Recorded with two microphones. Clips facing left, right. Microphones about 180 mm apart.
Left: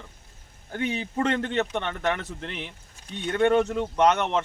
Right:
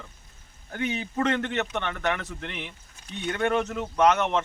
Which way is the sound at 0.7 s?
30° left (ahead or behind).